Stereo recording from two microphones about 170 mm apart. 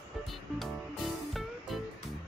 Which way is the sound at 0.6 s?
Centre (ahead or behind).